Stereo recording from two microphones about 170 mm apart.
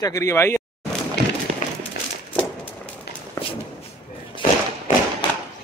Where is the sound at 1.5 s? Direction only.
45° right (ahead or behind).